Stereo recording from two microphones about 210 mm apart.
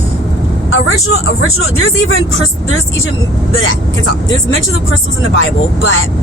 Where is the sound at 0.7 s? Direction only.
80° left.